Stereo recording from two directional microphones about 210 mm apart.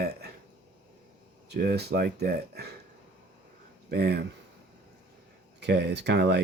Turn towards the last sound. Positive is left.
turn(degrees=-55)  # may be behind; listen again after turning